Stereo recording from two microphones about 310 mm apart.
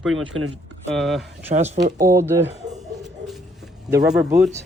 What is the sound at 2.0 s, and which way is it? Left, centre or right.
Speech, centre.